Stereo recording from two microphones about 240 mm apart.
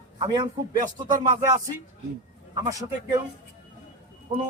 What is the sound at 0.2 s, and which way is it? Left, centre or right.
A man's voice, centre.